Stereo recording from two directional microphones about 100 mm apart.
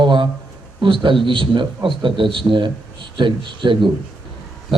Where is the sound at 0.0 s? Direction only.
55° right (ahead or behind).